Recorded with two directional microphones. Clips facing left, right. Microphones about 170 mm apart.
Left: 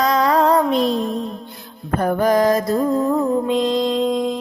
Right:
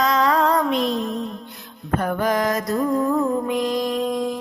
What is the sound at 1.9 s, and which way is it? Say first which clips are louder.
Music: left 5 dB; 35° left (ahead or behind).